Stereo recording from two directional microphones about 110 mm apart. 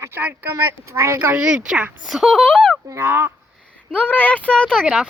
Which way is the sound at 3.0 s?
20° right (ahead or behind).